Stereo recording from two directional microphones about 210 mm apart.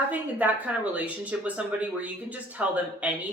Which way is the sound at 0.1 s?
5° right (ahead or behind).